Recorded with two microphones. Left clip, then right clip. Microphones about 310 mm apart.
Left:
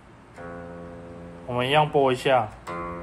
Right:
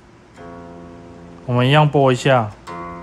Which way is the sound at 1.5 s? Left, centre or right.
Right.